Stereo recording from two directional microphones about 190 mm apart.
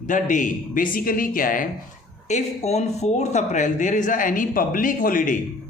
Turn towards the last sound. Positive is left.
turn(degrees=45)  # may be behind; listen again after turning